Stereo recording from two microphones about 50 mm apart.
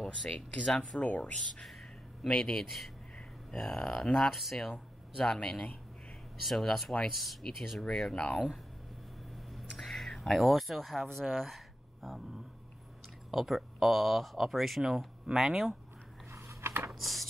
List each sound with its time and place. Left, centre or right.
0.2 s speech: centre
1.0 s speech: left
1.6 s music: centre
2.2 s speech: centre
2.6 s speech: centre
5.2 s speech: centre
8.2 s speech: left
9.3 s a sound: centre
13.3 s speech: centre
16.3 s a sound: right
17.0 s speech: centre